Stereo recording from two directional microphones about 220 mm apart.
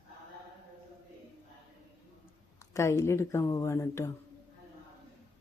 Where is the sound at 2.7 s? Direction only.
15° left (ahead or behind).